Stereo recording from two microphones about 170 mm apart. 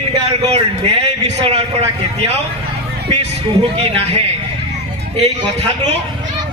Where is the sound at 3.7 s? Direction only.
35° right (ahead or behind).